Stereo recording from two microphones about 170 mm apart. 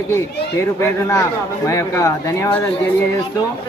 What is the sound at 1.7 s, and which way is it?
Speech, 15° left (ahead or behind).